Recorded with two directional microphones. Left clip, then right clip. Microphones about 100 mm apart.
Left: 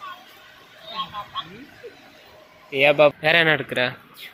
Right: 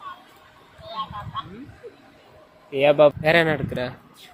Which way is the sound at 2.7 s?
15° right (ahead or behind).